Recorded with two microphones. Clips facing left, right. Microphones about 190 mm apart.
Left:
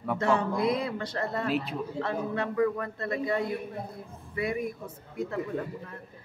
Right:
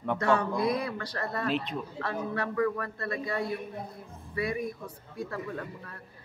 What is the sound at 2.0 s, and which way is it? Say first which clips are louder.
A man's voice: left 3 dB; 20° left (ahead or behind).